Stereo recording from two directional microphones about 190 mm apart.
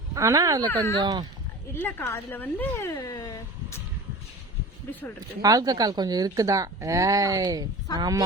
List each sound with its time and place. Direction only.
0.1 s speech: 15° right (ahead or behind)
0.6 s speech: 10° left (ahead or behind)
1.0 s speech: 20° right (ahead or behind)
1.7 s speech: 10° left (ahead or behind)
4.9 s speech: 10° left (ahead or behind)
5.4 s speech: 20° right (ahead or behind)